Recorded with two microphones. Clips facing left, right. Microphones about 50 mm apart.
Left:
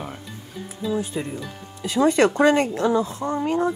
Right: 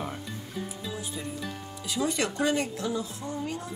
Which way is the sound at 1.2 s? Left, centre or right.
Left.